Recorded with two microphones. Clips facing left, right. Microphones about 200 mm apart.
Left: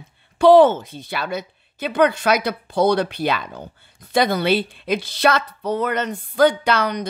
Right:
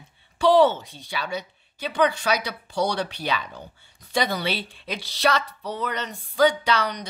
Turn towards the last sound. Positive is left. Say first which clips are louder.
# left 4 dB
turn(degrees=55)  # may be behind; listen again after turning